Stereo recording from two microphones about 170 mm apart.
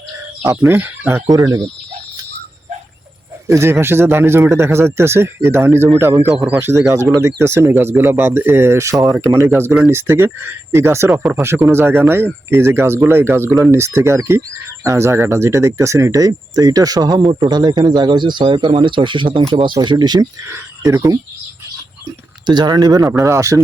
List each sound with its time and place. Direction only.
0.4 s speech: 15° right (ahead or behind)
3.4 s speech: 15° right (ahead or behind)
22.4 s speech: 25° right (ahead or behind)